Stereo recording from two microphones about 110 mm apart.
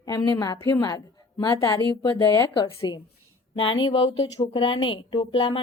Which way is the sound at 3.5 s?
50° left (ahead or behind).